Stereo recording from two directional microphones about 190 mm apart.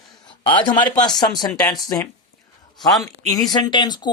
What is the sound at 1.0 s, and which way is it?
Speech, 20° left (ahead or behind).